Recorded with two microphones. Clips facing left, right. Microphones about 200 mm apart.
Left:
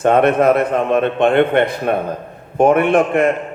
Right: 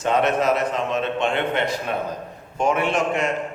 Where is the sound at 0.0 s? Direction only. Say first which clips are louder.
Left 8 dB; 55° left (ahead or behind).